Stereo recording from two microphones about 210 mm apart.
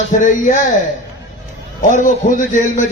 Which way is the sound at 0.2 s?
40° left (ahead or behind).